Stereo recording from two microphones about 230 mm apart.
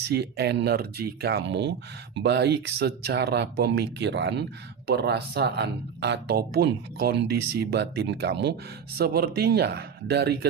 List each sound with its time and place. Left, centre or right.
0.0 s speech: right